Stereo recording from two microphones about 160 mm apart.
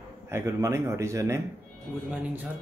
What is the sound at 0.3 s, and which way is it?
Speech, 20° right (ahead or behind).